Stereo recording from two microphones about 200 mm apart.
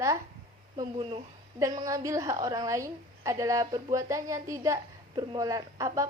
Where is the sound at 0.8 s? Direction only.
20° right (ahead or behind).